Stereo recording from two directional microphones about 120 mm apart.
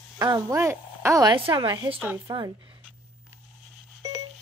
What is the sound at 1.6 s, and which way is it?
Speech, 40° right (ahead or behind).